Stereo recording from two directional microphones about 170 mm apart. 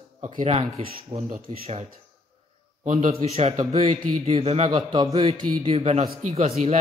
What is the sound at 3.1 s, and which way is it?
A man's voice, 35° right (ahead or behind).